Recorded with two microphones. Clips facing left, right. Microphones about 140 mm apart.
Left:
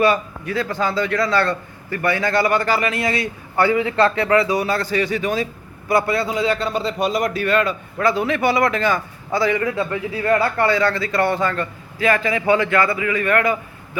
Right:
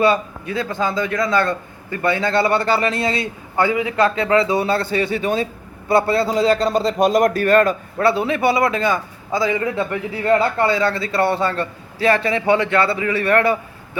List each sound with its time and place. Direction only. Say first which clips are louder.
0.0 s a man's voice: right 1 dB; 25° right (ahead or behind)
3.5 s a man's voice: left 1 dB; 15° right (ahead or behind); by 7.8 s 45° right (ahead or behind)
7.9 s a man's voice: even; 30° right (ahead or behind)